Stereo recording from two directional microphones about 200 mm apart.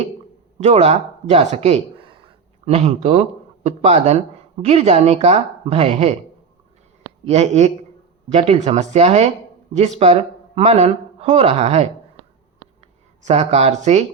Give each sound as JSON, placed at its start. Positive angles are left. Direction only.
{"t": 0.6, "sound": "speech", "side_deg": -30}
{"t": 7.3, "sound": "speech", "side_deg": -35}
{"t": 13.2, "sound": "speech", "side_deg": -35}